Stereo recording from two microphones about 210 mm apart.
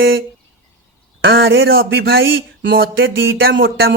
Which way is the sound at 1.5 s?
70° right (ahead or behind).